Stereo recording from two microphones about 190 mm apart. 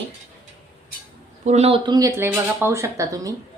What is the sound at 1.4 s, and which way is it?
Speech, 35° right (ahead or behind).